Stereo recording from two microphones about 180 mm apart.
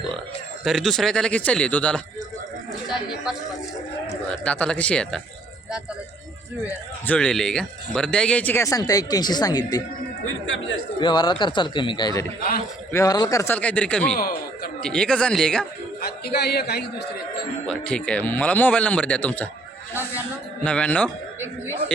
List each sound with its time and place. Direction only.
0.6 s speech: centre (ahead or behind)
3.3 s speech: 5° right (ahead or behind)
4.4 s speech: 5° left (ahead or behind)
6.7 s speech: 10° left (ahead or behind)
11.0 s a man's voice: 25° left (ahead or behind); by 14.2 s 5° left (ahead or behind)
14.2 s a man's voice: 55° left (ahead or behind)
14.8 s speech: 5° left (ahead or behind)
16.0 s a man's voice: 60° left (ahead or behind)
17.7 s speech: 5° left (ahead or behind)
19.9 s speech: 10° right (ahead or behind)
20.7 s speech: 5° left (ahead or behind)